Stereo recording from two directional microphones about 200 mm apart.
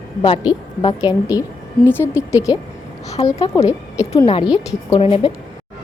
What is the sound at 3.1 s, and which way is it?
A woman's voice, 30° left (ahead or behind).